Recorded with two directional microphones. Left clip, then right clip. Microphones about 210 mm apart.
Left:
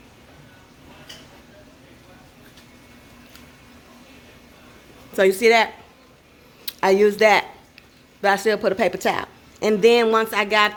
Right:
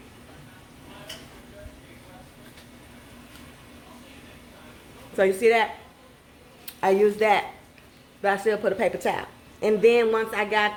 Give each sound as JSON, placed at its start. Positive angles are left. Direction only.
{"t": 5.1, "sound": "a woman's voice", "side_deg": 55}
{"t": 6.7, "sound": "a woman's voice", "side_deg": 50}